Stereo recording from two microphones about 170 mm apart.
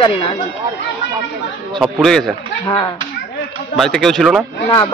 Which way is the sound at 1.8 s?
Centre (ahead or behind).